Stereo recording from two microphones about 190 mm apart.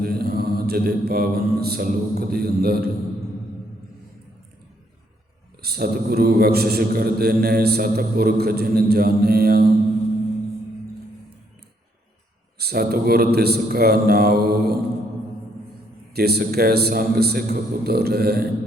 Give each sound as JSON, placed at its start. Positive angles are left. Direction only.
{"t": 0.0, "sound": "a man's voice", "side_deg": -55}
{"t": 5.6, "sound": "a man's voice", "side_deg": -55}
{"t": 12.5, "sound": "a man's voice", "side_deg": -55}
{"t": 16.1, "sound": "a man's voice", "side_deg": -55}